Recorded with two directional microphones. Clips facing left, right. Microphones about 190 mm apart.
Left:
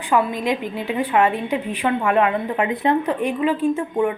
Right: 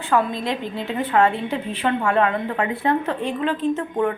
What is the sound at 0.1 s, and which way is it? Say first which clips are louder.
Speech: left 2 dB; 15° left (ahead or behind).